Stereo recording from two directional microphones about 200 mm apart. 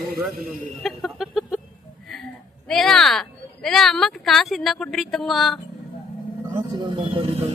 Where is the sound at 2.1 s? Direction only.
Centre (ahead or behind).